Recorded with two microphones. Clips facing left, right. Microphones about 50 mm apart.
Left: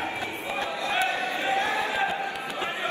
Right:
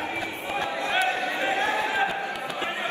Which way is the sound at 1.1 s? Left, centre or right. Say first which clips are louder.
Right 1 dB; right.